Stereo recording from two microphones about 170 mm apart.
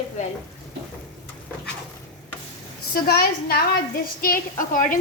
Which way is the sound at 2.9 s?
60° left (ahead or behind).